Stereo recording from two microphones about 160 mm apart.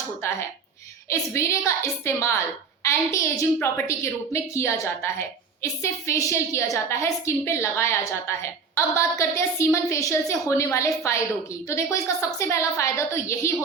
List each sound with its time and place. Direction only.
0.2 s a woman's voice: 15° left (ahead or behind)